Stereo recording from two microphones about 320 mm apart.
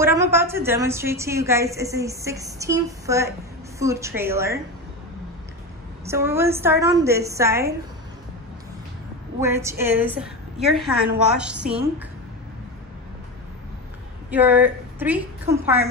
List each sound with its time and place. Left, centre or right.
0.0 s a woman's voice: centre
6.0 s a woman's voice: centre
9.4 s a woman's voice: centre
14.3 s a woman's voice: centre